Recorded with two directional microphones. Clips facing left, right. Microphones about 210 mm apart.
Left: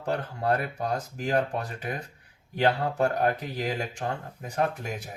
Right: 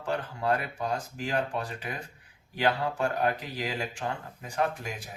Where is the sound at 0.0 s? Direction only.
40° left (ahead or behind).